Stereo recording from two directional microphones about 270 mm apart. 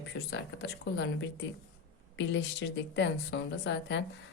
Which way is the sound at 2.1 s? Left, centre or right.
Left.